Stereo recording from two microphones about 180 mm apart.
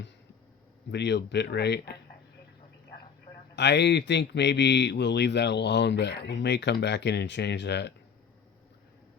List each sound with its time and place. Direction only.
0.9 s speech: 70° left (ahead or behind)
3.5 s speech: 75° left (ahead or behind)